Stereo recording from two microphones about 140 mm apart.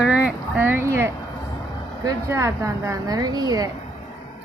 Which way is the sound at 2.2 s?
20° right (ahead or behind).